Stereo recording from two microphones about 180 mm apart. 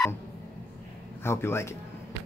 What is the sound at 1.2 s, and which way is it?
Speech, 15° left (ahead or behind).